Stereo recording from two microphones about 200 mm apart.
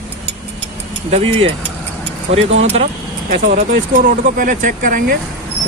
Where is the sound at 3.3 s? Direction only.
45° right (ahead or behind).